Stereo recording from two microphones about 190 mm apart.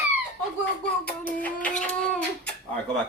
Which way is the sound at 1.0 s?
10° left (ahead or behind).